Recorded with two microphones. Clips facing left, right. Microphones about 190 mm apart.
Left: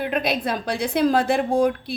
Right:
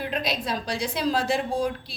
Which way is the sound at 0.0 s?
55° left (ahead or behind).